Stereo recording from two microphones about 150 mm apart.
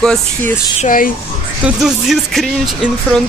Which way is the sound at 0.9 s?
70° left (ahead or behind).